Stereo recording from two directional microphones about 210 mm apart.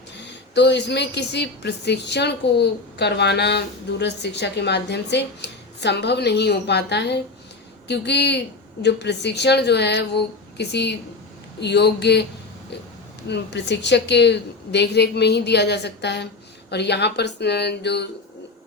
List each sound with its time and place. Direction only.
0.2 s a woman's voice: 55° left (ahead or behind)
13.2 s a woman's voice: 55° left (ahead or behind)